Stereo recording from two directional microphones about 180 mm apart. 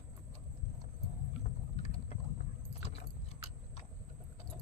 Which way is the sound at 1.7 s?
35° left (ahead or behind).